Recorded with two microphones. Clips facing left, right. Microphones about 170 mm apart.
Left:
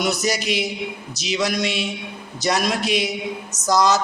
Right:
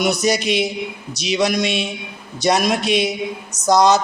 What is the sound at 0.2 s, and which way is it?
Music, 20° right (ahead or behind).